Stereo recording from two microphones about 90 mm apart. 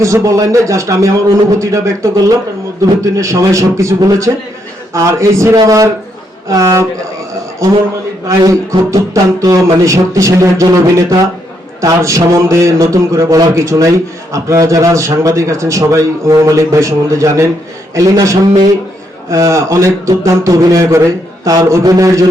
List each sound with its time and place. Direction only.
0.0 s a man's voice: 35° right (ahead or behind)
8.4 s a man's voice: 40° right (ahead or behind)
11.8 s a man's voice: 35° right (ahead or behind)